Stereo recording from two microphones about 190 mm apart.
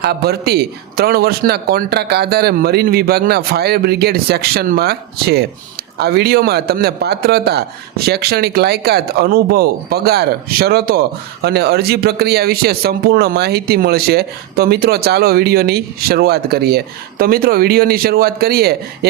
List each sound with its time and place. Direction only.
0.0 s speech: 55° right (ahead or behind)